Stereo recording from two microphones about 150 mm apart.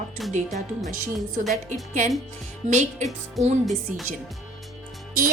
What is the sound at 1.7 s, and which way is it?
Music, 55° right (ahead or behind).